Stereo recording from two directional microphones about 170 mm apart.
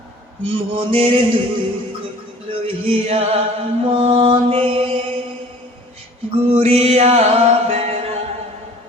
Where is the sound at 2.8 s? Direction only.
35° right (ahead or behind).